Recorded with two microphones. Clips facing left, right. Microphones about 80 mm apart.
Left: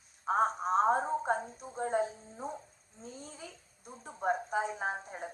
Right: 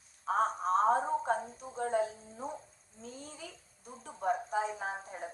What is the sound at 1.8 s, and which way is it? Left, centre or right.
Music, left.